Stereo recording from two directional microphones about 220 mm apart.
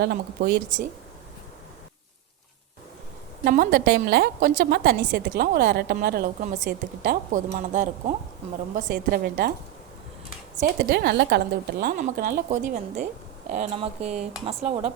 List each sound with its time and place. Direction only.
0.0 s a woman's voice: 50° right (ahead or behind)
3.4 s a woman's voice: 40° right (ahead or behind)
10.8 s a woman's voice: 50° right (ahead or behind); by 14.9 s 25° right (ahead or behind)